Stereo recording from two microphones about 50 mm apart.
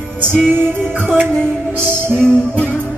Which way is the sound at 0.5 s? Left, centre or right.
Right.